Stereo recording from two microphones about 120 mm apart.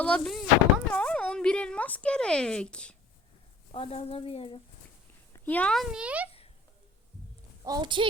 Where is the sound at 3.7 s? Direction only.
55° left (ahead or behind).